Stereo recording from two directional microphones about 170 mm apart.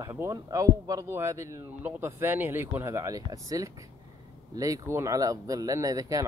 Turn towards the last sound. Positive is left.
turn(degrees=-20)  # may be behind; listen again after turning